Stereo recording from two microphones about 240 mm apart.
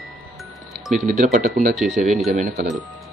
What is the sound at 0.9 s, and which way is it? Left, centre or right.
Speech, right.